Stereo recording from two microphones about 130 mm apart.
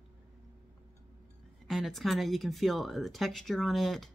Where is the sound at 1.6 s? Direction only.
Centre (ahead or behind).